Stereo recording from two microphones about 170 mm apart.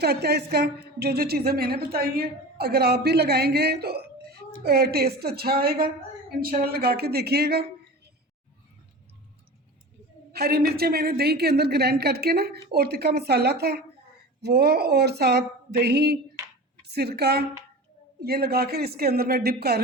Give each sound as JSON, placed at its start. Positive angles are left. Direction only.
{"t": 0.0, "sound": "a woman's voice", "side_deg": -70}
{"t": 10.3, "sound": "a woman's voice", "side_deg": -65}